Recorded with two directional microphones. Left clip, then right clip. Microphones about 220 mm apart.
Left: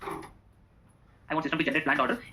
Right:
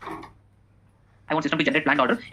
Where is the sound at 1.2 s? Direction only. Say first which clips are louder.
Right 5 dB; 55° right (ahead or behind).